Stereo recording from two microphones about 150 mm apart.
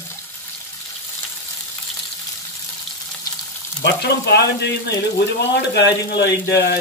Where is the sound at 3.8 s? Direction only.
90° left.